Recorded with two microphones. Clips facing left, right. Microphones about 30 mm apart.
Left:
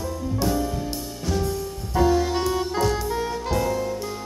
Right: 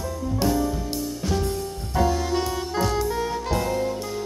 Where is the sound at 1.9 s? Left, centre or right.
Centre.